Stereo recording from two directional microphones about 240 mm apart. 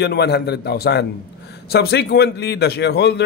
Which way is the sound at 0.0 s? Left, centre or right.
Left.